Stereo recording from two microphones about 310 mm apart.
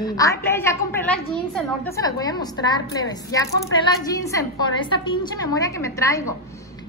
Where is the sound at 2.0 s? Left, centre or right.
Centre.